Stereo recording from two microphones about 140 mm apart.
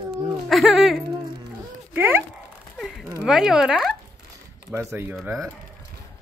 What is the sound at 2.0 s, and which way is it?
Speech, 15° right (ahead or behind).